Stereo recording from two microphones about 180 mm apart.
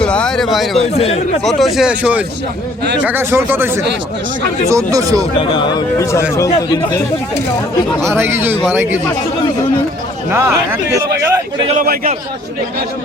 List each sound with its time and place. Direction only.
0.0 s speech: 5° left (ahead or behind)
0.8 s speech: 35° left (ahead or behind)
1.5 s speech: centre (ahead or behind); by 5.3 s 20° right (ahead or behind)
5.4 s speech: 25° left (ahead or behind)
8.0 s speech: 15° right (ahead or behind)
10.3 s speech: 15° right (ahead or behind)
11.2 s a sound: 15° right (ahead or behind)
11.7 s a man's voice: 40° right (ahead or behind)